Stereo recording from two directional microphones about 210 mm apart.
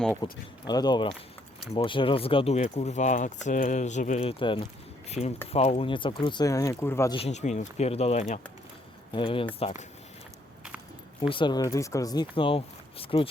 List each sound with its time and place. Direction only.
0.2 s speech: 20° left (ahead or behind)
7.2 s speech: 30° left (ahead or behind)
11.2 s speech: 25° left (ahead or behind)